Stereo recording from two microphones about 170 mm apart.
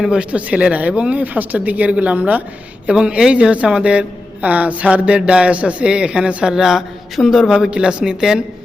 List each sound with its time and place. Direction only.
0.0 s a woman's voice: 5° right (ahead or behind)